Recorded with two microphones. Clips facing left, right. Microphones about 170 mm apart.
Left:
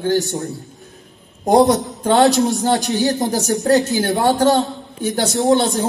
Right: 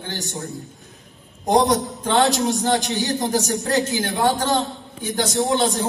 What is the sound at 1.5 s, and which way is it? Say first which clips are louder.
Speech: left 5 dB; 35° left (ahead or behind).